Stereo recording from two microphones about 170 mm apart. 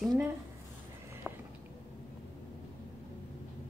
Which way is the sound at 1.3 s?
5° right (ahead or behind).